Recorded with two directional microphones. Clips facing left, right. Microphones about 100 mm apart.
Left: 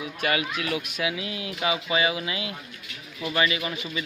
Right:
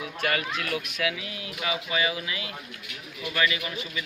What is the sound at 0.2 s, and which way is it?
A man's voice, 10° left (ahead or behind).